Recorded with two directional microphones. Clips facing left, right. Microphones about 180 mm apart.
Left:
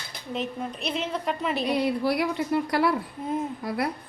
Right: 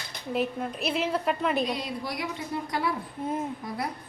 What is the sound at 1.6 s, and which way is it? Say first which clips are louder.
A woman's voice: left 6 dB; 60° left (ahead or behind).